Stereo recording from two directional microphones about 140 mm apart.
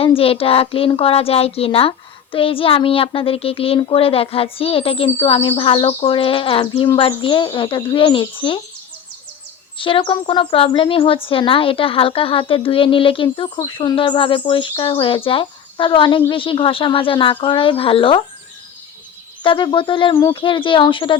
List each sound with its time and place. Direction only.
0.0 s speech: 40° left (ahead or behind)
9.7 s speech: 40° left (ahead or behind)
19.4 s speech: 35° left (ahead or behind)